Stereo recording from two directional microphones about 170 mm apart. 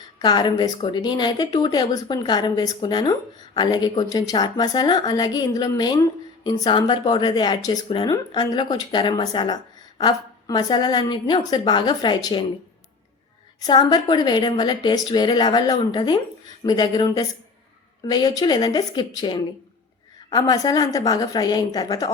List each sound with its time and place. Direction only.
0.2 s speech: 25° left (ahead or behind)
13.6 s speech: 25° left (ahead or behind)